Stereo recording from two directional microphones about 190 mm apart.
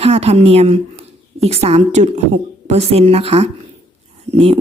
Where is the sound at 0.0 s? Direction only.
30° right (ahead or behind).